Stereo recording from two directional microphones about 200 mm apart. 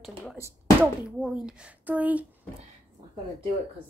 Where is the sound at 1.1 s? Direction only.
5° right (ahead or behind).